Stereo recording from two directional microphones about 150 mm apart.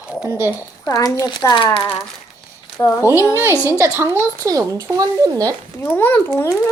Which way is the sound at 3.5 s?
15° left (ahead or behind).